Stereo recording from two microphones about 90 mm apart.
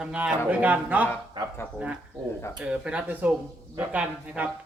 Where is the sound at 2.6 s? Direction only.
10° right (ahead or behind).